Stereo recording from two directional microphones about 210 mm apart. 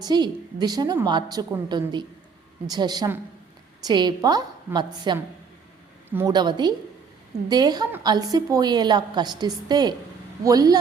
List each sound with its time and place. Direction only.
0.0 s a woman's voice: 20° right (ahead or behind)
6.1 s a woman's voice: 10° right (ahead or behind)
6.3 s a woman's voice: 20° right (ahead or behind)